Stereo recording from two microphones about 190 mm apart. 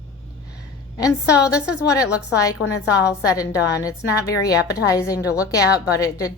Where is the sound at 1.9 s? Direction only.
15° left (ahead or behind).